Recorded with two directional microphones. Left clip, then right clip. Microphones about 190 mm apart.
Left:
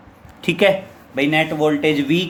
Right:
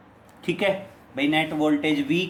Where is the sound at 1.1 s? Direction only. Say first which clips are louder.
Left 5 dB; 30° left (ahead or behind).